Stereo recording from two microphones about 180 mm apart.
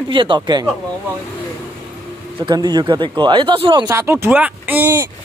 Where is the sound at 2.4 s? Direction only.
25° right (ahead or behind).